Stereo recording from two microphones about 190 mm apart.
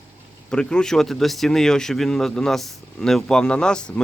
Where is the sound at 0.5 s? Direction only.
5° left (ahead or behind).